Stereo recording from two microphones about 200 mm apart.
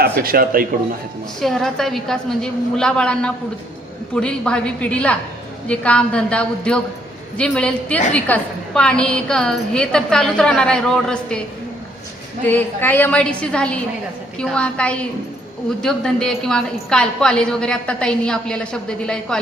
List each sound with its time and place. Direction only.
0.0 s speech: 50° right (ahead or behind)
1.4 s a woman's voice: centre (ahead or behind)
12.5 s a woman's voice: 10° left (ahead or behind)